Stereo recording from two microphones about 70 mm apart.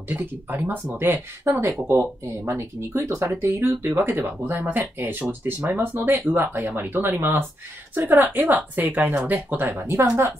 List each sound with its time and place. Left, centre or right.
0.1 s speech: right
1.5 s speech: right
9.8 s speech: right